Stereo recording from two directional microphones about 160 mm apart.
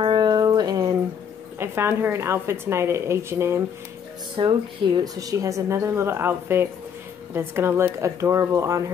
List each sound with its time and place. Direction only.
0.0 s a sound: 25° right (ahead or behind)
1.6 s speech: 15° right (ahead or behind)
4.4 s a woman's voice: 30° right (ahead or behind)